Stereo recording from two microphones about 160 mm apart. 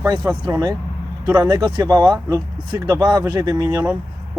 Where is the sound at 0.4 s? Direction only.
25° right (ahead or behind).